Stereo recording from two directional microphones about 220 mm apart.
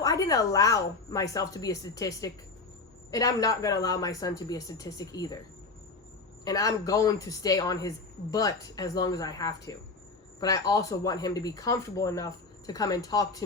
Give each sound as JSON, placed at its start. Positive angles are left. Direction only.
{"t": 0.0, "sound": "a woman's voice", "side_deg": 15}
{"t": 6.4, "sound": "a woman's voice", "side_deg": 15}